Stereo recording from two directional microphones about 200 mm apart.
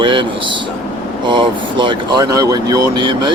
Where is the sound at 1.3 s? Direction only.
25° right (ahead or behind).